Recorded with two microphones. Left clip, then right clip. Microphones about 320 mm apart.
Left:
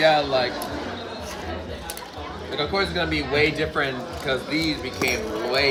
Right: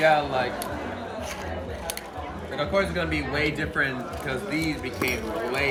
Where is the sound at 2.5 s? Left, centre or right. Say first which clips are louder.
Left 1 dB; centre.